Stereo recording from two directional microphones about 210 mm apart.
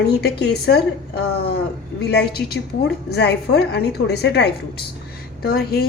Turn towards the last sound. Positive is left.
turn(degrees=45)  # may be behind; listen again after turning